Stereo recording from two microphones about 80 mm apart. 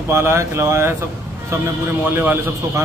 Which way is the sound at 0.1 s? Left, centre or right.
Right.